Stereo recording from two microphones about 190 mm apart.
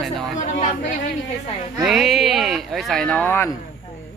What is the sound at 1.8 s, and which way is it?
Speech, centre (ahead or behind).